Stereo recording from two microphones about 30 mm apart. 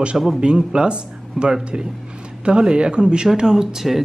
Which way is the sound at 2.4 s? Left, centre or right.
Right.